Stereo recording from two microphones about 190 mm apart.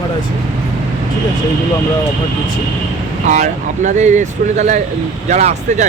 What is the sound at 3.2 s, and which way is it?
Speech, 40° right (ahead or behind).